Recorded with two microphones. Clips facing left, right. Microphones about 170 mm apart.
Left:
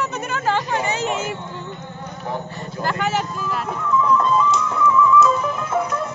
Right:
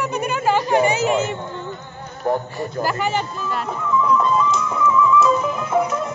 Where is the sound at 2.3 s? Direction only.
50° right (ahead or behind).